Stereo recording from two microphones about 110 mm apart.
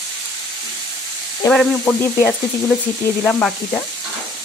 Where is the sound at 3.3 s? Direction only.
10° left (ahead or behind).